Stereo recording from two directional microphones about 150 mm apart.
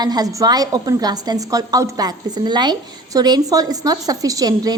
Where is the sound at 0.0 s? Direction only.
25° right (ahead or behind).